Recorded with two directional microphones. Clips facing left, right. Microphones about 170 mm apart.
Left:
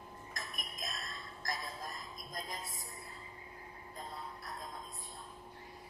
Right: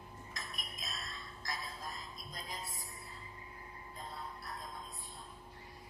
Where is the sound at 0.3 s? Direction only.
50° left (ahead or behind).